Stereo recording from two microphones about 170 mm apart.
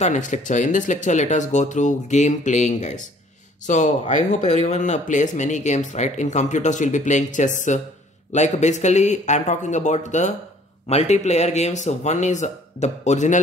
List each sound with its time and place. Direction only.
0.0 s speech: 45° left (ahead or behind)